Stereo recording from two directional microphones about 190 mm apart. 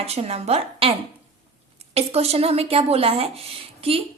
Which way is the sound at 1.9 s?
35° right (ahead or behind).